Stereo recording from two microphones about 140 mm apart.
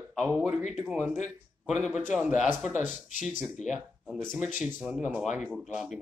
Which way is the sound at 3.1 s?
65° left (ahead or behind).